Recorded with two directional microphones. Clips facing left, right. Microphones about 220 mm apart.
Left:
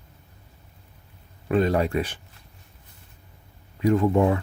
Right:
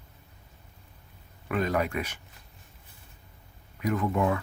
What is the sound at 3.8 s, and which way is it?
Speech, 30° left (ahead or behind).